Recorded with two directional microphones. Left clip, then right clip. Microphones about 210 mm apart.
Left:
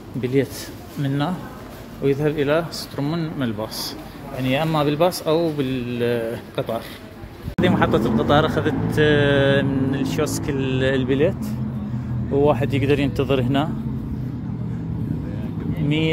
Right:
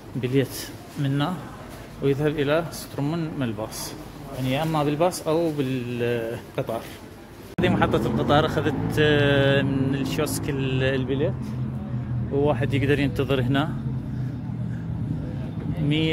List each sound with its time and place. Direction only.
0.2 s speech: 5° right (ahead or behind)
11.1 s speech: 20° left (ahead or behind)
12.4 s speech: centre (ahead or behind)